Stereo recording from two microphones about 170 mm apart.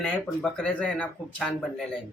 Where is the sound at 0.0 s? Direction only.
5° left (ahead or behind).